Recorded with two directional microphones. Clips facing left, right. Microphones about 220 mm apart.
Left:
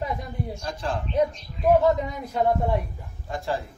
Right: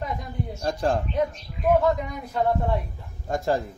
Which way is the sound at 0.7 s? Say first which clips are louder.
Right 8 dB; 45° right (ahead or behind).